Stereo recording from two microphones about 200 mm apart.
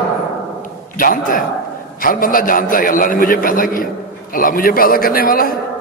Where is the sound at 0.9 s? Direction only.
45° left (ahead or behind).